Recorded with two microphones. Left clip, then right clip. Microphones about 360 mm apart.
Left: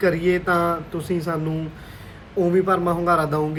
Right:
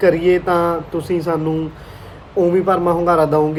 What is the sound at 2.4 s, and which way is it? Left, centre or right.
Speech, right.